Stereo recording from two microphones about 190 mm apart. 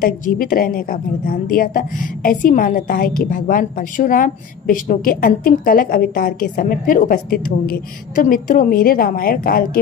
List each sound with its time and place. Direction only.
0.0 s a woman's voice: 50° left (ahead or behind)